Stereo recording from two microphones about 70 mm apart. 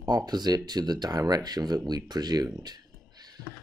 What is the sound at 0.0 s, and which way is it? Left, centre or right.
Speech, right.